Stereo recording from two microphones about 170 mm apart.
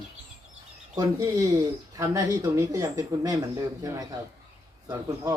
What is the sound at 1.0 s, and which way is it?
Speech, 20° right (ahead or behind).